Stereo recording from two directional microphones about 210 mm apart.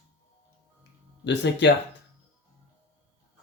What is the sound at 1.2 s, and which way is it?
Speech, 55° left (ahead or behind).